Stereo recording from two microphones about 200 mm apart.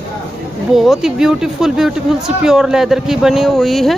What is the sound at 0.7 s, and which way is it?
Speech, centre (ahead or behind).